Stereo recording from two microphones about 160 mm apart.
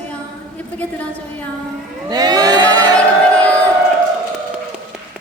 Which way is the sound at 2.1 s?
25° right (ahead or behind).